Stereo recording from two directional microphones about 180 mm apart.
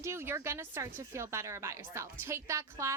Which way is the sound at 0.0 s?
15° right (ahead or behind).